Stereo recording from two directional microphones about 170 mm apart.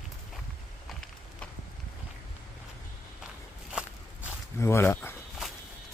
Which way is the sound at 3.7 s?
5° right (ahead or behind).